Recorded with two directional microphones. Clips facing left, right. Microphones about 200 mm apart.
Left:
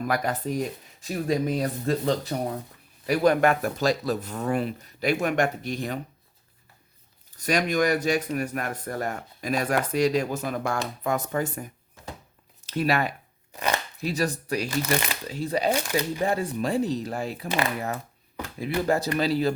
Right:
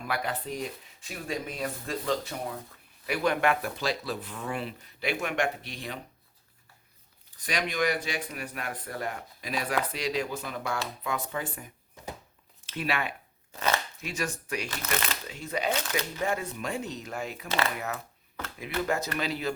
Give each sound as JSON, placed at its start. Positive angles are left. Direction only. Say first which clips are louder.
{"t": 0.0, "sound": "speech", "louder": "left 6 dB", "side_deg": 45}
{"t": 7.3, "sound": "speech", "louder": "left 7 dB", "side_deg": 45}
{"t": 14.7, "sound": "speech", "louder": "left 7 dB", "side_deg": 10}
{"t": 15.3, "sound": "speech", "louder": "left 7 dB", "side_deg": 35}
{"t": 15.7, "sound": "speech", "louder": "left 5 dB", "side_deg": 10}
{"t": 16.2, "sound": "speech", "louder": "left 4 dB", "side_deg": 35}
{"t": 18.9, "sound": "speech", "louder": "left 8 dB", "side_deg": 35}